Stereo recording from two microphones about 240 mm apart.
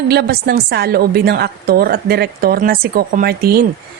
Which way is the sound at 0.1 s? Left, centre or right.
Right.